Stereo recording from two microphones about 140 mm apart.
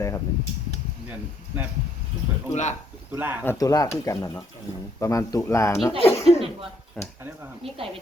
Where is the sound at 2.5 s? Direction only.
55° left (ahead or behind).